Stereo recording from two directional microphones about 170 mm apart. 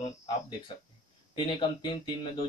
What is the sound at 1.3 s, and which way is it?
Speech, 30° left (ahead or behind).